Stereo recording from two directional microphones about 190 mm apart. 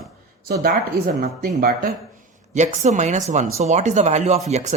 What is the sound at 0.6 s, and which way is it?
Speech, 50° right (ahead or behind).